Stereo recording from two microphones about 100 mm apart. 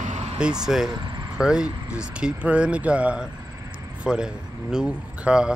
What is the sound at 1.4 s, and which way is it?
Speech, 10° right (ahead or behind).